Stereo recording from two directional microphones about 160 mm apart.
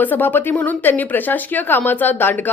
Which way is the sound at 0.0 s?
10° left (ahead or behind).